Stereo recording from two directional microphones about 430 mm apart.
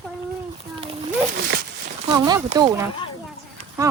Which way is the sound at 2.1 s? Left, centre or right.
Centre.